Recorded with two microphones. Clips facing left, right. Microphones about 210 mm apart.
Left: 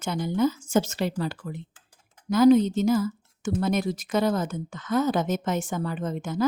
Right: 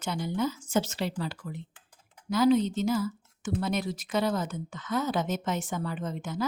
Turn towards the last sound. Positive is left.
turn(degrees=45)  # may be behind; listen again after turning